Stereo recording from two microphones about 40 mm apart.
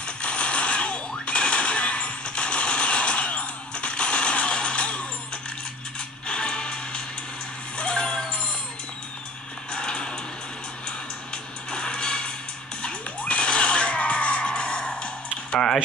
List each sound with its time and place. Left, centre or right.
0.0 s a sound: left
6.2 s music: left
7.7 s vehicle: left
9.7 s music: left
11.7 s music: left
15.5 s a sound: centre